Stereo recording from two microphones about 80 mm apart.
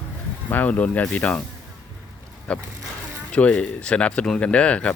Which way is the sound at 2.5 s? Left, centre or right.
Centre.